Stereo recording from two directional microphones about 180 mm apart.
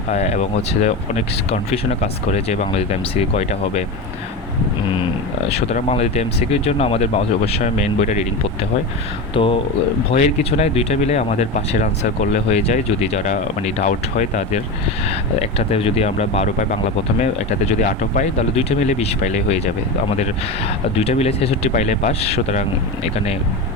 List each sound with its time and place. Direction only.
0.1 s speech: 35° left (ahead or behind)
5.5 s speech: 35° left (ahead or behind)
9.3 s speech: 30° left (ahead or behind)
17.7 s speech: 45° left (ahead or behind)
21.0 s speech: 35° left (ahead or behind)